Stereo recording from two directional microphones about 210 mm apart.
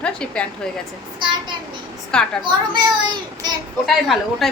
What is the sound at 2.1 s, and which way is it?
Speech, 5° left (ahead or behind).